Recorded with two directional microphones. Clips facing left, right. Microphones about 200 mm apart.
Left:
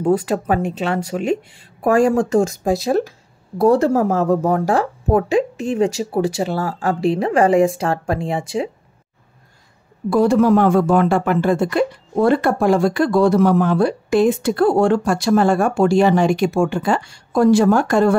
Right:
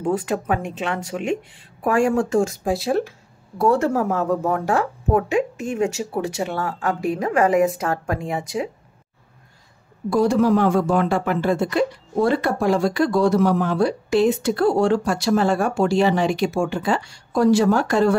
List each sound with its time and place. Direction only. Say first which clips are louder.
0.0 s speech: left 5 dB; 40° left (ahead or behind)
10.0 s speech: left 3 dB; 55° left (ahead or behind)